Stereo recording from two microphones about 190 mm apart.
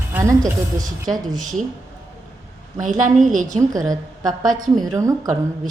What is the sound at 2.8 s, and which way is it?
Speech, 40° right (ahead or behind).